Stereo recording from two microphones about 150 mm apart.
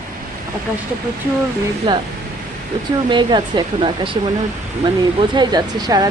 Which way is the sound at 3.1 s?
30° right (ahead or behind).